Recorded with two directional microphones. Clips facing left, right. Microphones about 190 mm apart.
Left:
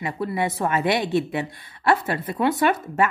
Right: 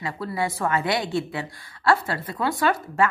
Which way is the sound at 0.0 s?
20° left (ahead or behind).